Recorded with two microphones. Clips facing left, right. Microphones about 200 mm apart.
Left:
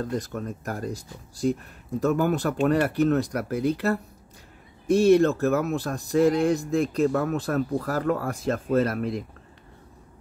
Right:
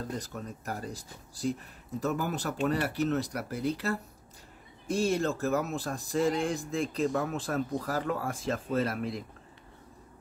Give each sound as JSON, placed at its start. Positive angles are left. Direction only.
{"t": 0.0, "sound": "speech", "side_deg": 55}
{"t": 2.0, "sound": "speech", "side_deg": 60}